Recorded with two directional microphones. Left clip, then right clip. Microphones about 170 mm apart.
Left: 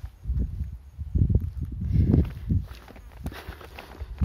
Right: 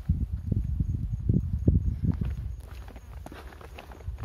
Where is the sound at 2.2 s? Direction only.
80° left.